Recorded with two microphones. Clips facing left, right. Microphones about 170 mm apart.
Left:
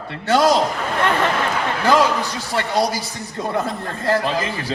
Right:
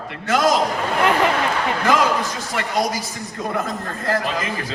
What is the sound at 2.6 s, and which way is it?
A man's voice, 30° left (ahead or behind).